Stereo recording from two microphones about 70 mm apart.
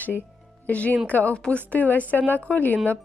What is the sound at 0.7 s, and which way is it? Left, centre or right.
A woman's voice, left.